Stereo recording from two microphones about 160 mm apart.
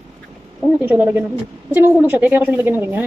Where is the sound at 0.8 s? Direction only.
10° right (ahead or behind).